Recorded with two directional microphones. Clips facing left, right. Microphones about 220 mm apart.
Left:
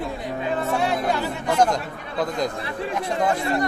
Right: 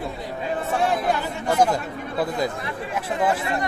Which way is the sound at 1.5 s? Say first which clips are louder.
Even; 5° right (ahead or behind).